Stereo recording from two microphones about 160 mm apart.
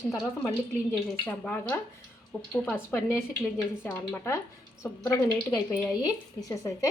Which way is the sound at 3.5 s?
15° left (ahead or behind).